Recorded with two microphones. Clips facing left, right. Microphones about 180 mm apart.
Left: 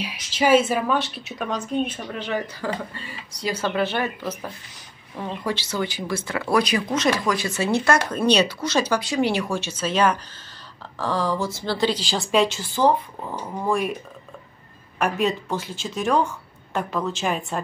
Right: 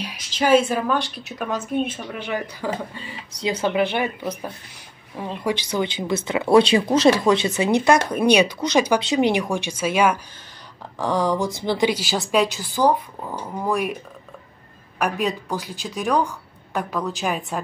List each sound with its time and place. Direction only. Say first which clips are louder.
0.0 s speech: left 1 dB; 10° left (ahead or behind)
15.0 s speech: left 1 dB; centre (ahead or behind)